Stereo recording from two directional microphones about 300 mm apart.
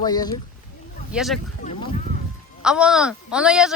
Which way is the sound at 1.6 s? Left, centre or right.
Left.